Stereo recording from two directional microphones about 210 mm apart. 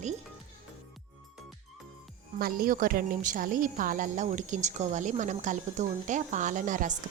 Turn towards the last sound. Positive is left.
turn(degrees=-40)  # may be behind; listen again after turning